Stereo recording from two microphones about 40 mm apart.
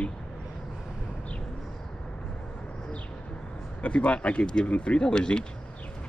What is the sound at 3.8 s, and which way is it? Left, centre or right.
Speech, left.